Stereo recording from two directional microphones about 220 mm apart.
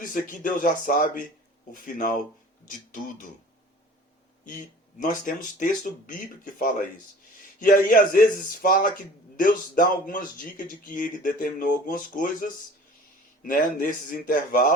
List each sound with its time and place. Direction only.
0.0 s speech: 40° left (ahead or behind)
4.4 s speech: 35° left (ahead or behind)